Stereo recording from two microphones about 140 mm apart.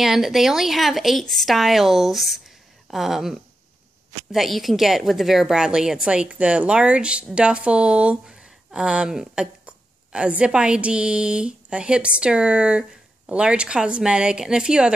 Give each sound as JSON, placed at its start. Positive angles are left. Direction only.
{"t": 0.0, "sound": "a woman's voice", "side_deg": 0}